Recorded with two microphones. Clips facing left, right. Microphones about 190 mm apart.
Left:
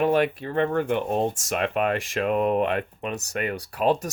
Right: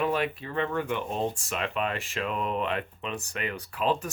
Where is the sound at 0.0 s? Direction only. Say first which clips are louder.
Left 6 dB; 50° left (ahead or behind).